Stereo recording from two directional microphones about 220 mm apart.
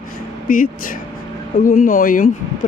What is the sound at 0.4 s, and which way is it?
Speech, 40° left (ahead or behind).